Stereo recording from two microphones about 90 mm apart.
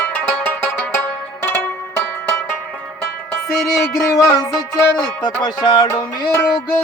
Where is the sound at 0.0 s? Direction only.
15° left (ahead or behind).